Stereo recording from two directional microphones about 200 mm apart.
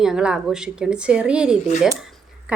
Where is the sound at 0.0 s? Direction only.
5° right (ahead or behind).